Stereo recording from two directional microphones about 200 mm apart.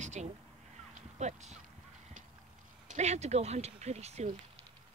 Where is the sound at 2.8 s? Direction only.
35° right (ahead or behind).